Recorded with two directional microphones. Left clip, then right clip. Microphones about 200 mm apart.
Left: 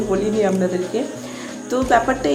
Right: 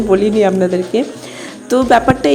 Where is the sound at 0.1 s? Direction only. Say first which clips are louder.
Right 8 dB; 40° right (ahead or behind).